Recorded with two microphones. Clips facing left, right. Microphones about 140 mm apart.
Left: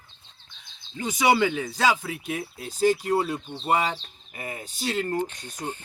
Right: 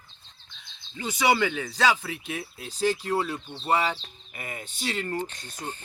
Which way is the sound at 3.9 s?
35° left (ahead or behind).